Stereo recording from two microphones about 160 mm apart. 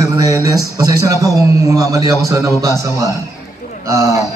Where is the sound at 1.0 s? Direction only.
20° right (ahead or behind).